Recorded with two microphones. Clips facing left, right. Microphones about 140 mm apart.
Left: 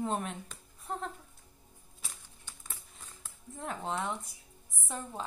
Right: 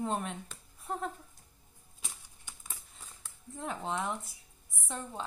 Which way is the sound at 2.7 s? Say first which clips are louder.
Even; centre (ahead or behind).